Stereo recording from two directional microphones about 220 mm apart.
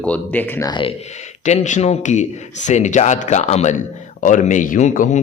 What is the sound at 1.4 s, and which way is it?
Speech, 30° left (ahead or behind).